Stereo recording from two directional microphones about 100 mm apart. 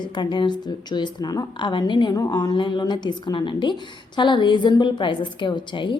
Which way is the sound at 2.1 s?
40° left (ahead or behind).